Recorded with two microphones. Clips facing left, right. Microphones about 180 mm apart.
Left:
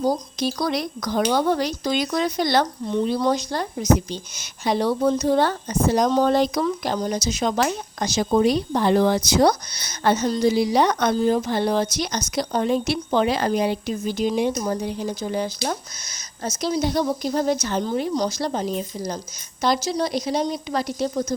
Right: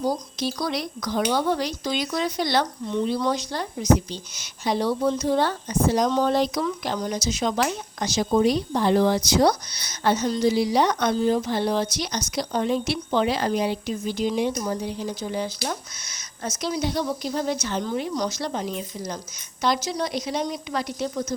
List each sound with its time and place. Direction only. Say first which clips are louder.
0.0 s speech: left 3 dB; 45° left (ahead or behind); by 4.9 s 65° left (ahead or behind)
5.0 s speech: left 4 dB; 45° left (ahead or behind)